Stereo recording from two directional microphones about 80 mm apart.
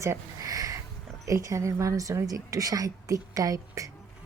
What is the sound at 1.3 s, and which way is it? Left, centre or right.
A woman's voice, right.